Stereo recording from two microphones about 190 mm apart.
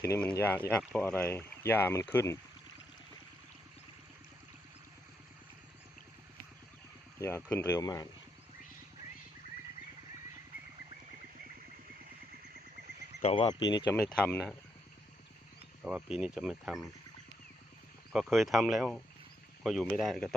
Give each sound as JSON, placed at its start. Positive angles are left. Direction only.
{"t": 0.1, "sound": "speech", "side_deg": 5}
{"t": 7.2, "sound": "speech", "side_deg": 15}
{"t": 13.2, "sound": "speech", "side_deg": 30}
{"t": 14.2, "sound": "speech", "side_deg": 5}
{"t": 15.8, "sound": "speech", "side_deg": -5}
{"t": 18.1, "sound": "speech", "side_deg": 0}